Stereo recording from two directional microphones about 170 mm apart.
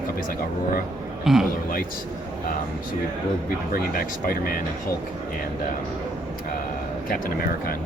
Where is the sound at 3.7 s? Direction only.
55° left (ahead or behind).